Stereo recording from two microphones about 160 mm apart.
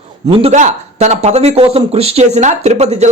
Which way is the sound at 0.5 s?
45° right (ahead or behind).